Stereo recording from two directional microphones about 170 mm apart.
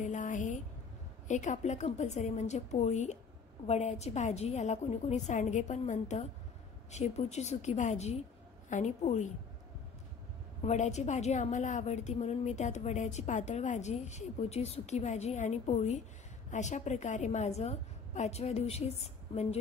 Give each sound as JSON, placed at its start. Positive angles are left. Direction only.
{"t": 0.0, "sound": "a sound", "side_deg": 45}
{"t": 1.2, "sound": "a woman's voice", "side_deg": 45}
{"t": 10.6, "sound": "a woman's voice", "side_deg": 40}